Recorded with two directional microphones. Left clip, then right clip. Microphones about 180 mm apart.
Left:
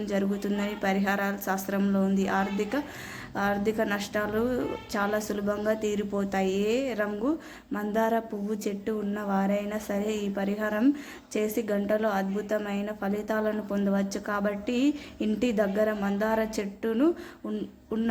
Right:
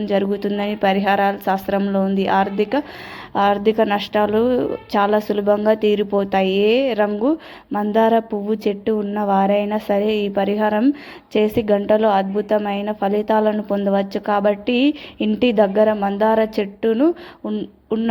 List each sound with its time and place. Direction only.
0.0 s speech: 30° right (ahead or behind)